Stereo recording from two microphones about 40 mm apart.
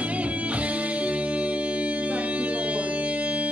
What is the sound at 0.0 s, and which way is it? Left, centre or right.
Music, right.